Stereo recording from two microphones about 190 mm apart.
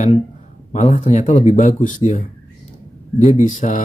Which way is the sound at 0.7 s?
35° left (ahead or behind).